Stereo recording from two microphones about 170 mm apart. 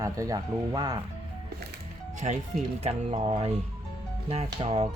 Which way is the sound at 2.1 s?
45° right (ahead or behind).